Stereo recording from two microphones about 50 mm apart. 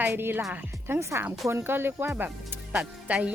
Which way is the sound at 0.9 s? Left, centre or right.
Right.